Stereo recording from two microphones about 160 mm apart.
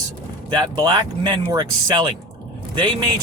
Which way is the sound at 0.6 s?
25° right (ahead or behind).